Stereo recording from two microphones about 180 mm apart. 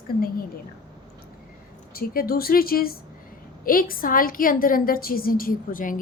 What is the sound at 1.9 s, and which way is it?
A woman's voice, 55° left (ahead or behind).